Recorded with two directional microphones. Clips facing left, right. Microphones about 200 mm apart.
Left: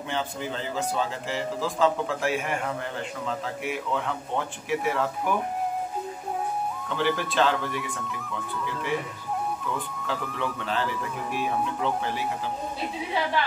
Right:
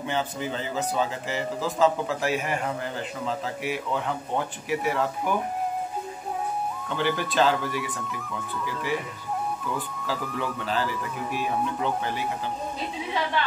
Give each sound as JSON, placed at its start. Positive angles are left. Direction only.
{"t": 0.1, "sound": "a man's voice", "side_deg": -5}
{"t": 7.0, "sound": "a man's voice", "side_deg": 0}
{"t": 9.8, "sound": "a man's voice", "side_deg": 0}